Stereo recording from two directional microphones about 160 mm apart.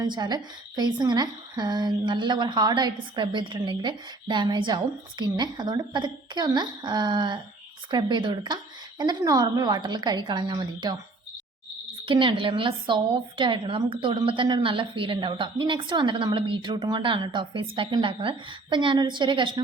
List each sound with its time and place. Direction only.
0.1 s a woman's voice: 25° right (ahead or behind)
12.0 s a woman's voice: 30° right (ahead or behind)